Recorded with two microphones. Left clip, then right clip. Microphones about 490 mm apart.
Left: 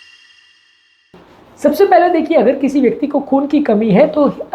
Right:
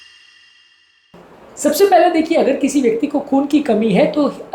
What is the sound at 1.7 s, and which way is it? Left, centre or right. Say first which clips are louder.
A woman's voice: left 1 dB; left.